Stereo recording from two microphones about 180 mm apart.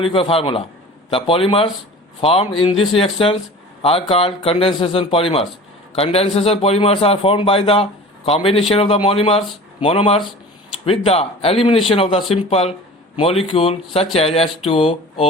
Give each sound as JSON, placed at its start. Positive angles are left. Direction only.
{"t": 0.1, "sound": "a man's voice", "side_deg": 30}